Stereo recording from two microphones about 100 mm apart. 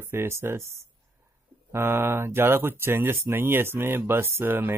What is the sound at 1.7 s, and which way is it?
Speech, 25° right (ahead or behind).